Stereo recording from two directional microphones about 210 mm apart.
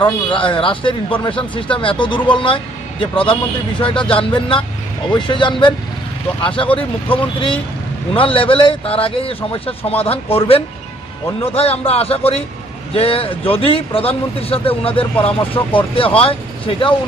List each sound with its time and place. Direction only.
0.0 s a man's voice: 25° left (ahead or behind)